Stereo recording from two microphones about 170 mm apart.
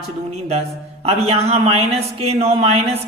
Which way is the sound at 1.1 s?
35° right (ahead or behind).